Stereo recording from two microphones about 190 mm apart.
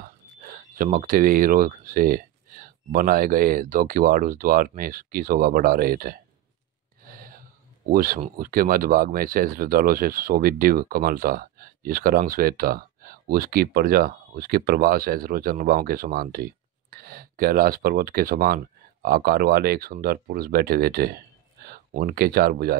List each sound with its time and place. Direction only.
0.0 s speech: 45° right (ahead or behind)
7.1 s gasp: 50° right (ahead or behind)
7.9 s speech: 50° right (ahead or behind)